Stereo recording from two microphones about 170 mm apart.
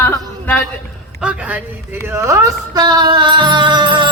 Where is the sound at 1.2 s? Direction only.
5° right (ahead or behind).